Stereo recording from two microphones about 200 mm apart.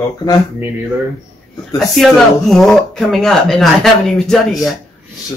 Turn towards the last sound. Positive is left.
turn(degrees=0)  # may be behind; listen again after turning